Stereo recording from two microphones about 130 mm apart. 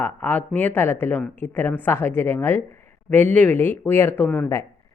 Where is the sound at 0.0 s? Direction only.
15° left (ahead or behind).